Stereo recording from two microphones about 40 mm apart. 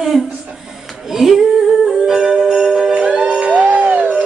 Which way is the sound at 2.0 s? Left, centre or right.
Centre.